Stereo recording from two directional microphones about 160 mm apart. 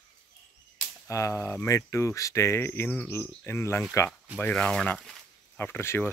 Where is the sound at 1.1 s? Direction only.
20° left (ahead or behind).